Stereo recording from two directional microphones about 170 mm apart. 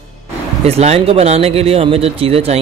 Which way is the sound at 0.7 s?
35° right (ahead or behind).